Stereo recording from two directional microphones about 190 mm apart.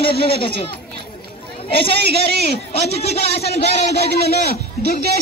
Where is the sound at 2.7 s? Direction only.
35° left (ahead or behind).